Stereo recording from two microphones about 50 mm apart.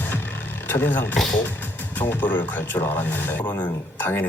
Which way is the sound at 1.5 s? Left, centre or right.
Left.